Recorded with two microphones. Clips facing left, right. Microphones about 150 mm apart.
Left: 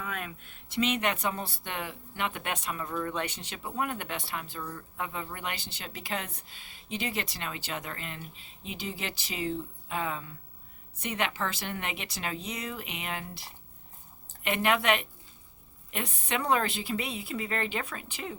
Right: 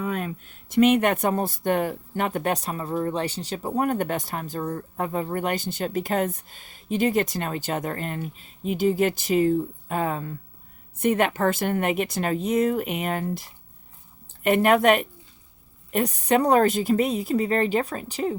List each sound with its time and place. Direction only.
0.0 s a woman's voice: 40° right (ahead or behind)